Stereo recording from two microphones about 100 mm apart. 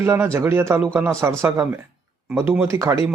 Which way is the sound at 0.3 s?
25° right (ahead or behind).